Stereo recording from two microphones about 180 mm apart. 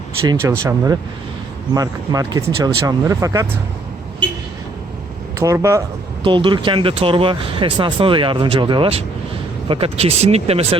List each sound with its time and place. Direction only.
0.6 s speech: 15° right (ahead or behind)
5.4 s speech: 15° right (ahead or behind)
6.2 s speech: 25° right (ahead or behind)